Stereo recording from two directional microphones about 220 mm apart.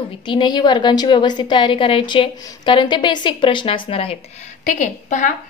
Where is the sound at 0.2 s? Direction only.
20° left (ahead or behind).